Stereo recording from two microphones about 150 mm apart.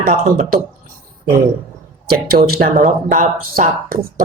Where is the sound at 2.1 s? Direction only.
90° right.